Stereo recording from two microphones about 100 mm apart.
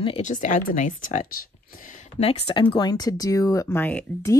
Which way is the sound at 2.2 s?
90° left.